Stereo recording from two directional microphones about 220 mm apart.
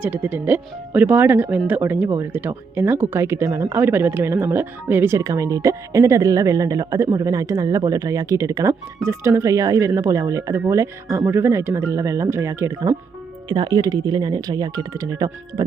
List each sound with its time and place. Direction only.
0.0 s speech: 10° right (ahead or behind)